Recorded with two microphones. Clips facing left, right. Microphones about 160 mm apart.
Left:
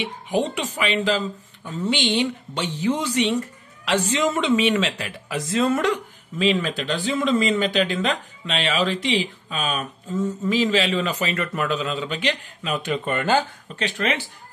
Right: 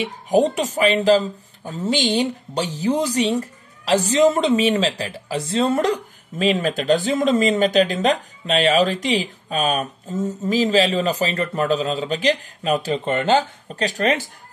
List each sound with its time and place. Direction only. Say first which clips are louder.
0.0 s speech: right 6 dB; 40° right (ahead or behind); by 13.5 s 20° right (ahead or behind)
13.7 s speech: right 4 dB; 40° right (ahead or behind)